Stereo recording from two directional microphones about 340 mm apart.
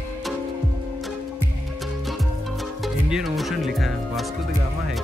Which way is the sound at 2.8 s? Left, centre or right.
Centre.